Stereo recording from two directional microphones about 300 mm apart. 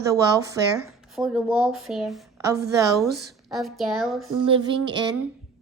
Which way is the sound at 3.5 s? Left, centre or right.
Centre.